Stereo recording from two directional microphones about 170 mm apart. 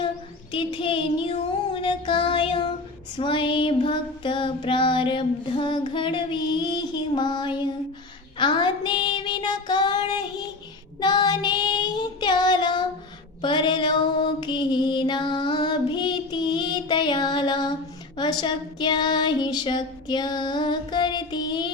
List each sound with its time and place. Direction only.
0.5 s child singing: 30° left (ahead or behind)
13.4 s mantra: 30° left (ahead or behind)
18.2 s child singing: 25° left (ahead or behind)